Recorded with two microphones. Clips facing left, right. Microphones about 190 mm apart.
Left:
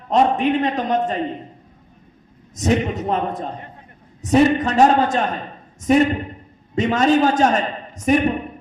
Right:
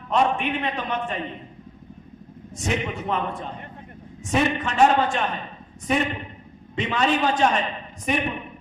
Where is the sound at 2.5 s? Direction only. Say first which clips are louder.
Left 8 dB; 40° left (ahead or behind).